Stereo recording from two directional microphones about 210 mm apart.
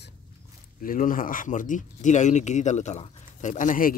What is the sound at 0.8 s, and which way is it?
Speech, 40° left (ahead or behind).